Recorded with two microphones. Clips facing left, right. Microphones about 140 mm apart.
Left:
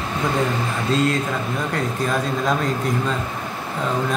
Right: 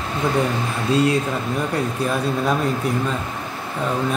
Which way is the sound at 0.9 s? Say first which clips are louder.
Right 3 dB; 10° right (ahead or behind).